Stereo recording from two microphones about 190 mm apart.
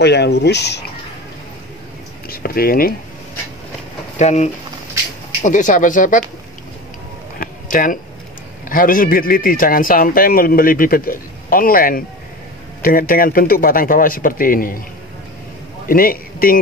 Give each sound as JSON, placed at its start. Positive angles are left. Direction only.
{"t": 0.0, "sound": "speech", "side_deg": 60}
{"t": 2.2, "sound": "a sound", "side_deg": 50}
{"t": 4.2, "sound": "a man's voice", "side_deg": 35}
{"t": 7.3, "sound": "a sound", "side_deg": 45}
{"t": 8.6, "sound": "a man's voice", "side_deg": 45}
{"t": 15.9, "sound": "a man's voice", "side_deg": 50}